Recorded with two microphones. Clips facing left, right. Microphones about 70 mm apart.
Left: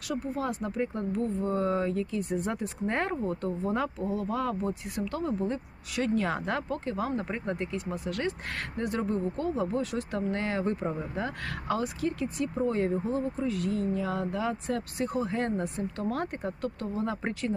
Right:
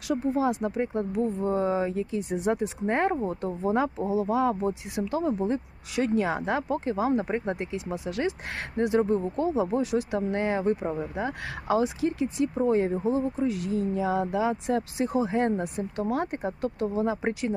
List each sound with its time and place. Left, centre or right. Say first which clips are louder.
0.1 s speech: right 6 dB; right
11.8 s speech: right 5 dB; right